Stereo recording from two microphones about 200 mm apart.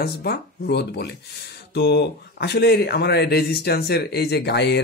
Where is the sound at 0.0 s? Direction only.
50° left (ahead or behind).